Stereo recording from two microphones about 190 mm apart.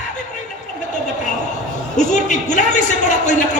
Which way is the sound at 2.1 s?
40° left (ahead or behind).